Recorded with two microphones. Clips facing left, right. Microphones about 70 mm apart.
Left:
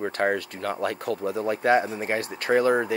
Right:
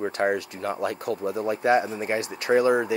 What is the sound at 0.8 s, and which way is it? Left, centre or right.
Speech, left.